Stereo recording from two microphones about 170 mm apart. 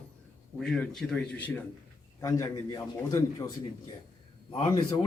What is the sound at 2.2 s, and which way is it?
Speech, 20° left (ahead or behind).